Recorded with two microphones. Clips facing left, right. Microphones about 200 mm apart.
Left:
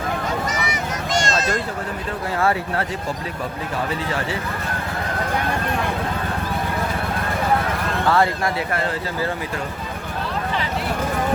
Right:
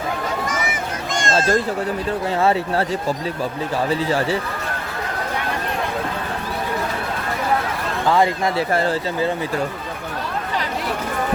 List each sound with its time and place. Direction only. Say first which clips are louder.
0.4 s a sound: even; 50° right (ahead or behind)
2.4 s speech: right 2 dB; 25° right (ahead or behind)
8.0 s speech: right 2 dB; 15° right (ahead or behind)